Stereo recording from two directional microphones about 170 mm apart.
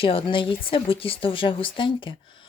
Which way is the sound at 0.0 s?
30° left (ahead or behind).